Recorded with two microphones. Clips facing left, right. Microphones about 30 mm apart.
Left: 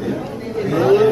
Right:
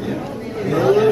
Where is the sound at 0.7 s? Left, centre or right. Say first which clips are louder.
Left 1 dB; centre.